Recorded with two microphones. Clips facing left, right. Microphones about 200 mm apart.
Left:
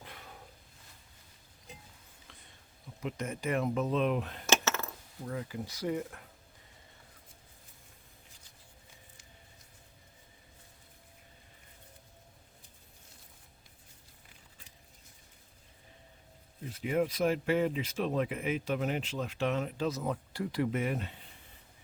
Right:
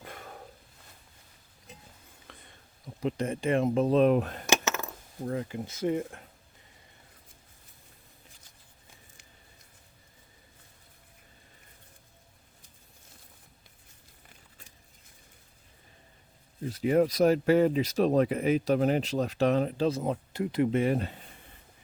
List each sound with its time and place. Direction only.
0.0 s a sound: 50° right (ahead or behind)
2.3 s whispering: 55° right (ahead or behind)
3.0 s speech: 30° right (ahead or behind)
4.4 s coin: 15° right (ahead or behind)
5.2 s speech: 35° right (ahead or behind)
5.5 s speech: 25° right (ahead or behind)
16.6 s speech: 40° right (ahead or behind)